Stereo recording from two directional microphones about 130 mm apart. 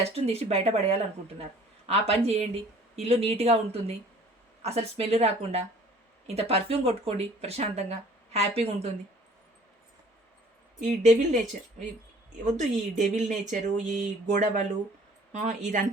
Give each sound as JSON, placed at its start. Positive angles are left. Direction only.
{"t": 0.0, "sound": "speech", "side_deg": -55}
{"t": 10.8, "sound": "speech", "side_deg": -70}
{"t": 12.5, "sound": "speech", "side_deg": -65}